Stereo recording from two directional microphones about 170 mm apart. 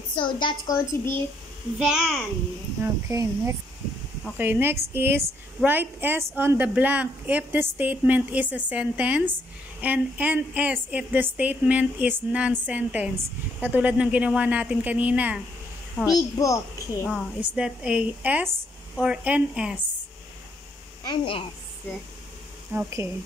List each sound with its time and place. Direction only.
0.1 s a child's voice: 30° left (ahead or behind)
1.8 s speech: 5° right (ahead or behind)
2.8 s a woman's voice: 15° right (ahead or behind)
16.1 s a child's voice: 20° left (ahead or behind)
17.6 s a woman's voice: 5° right (ahead or behind)
21.0 s a woman's voice: 25° left (ahead or behind)
22.7 s a woman's voice: 10° right (ahead or behind)